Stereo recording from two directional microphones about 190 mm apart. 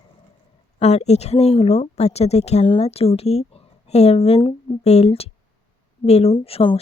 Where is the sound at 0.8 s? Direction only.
35° left (ahead or behind).